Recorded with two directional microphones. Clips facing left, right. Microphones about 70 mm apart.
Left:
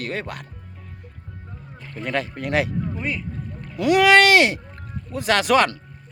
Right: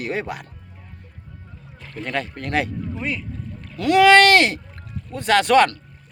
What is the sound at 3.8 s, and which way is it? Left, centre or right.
Speech, centre.